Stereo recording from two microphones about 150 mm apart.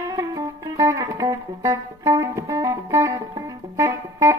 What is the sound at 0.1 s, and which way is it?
Music, 25° right (ahead or behind).